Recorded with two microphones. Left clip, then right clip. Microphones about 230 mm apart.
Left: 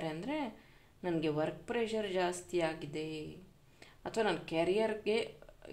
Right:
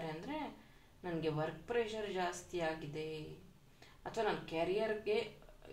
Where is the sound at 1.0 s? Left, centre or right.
Left.